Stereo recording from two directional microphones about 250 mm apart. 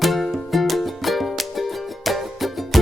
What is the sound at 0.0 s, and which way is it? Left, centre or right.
Music, centre.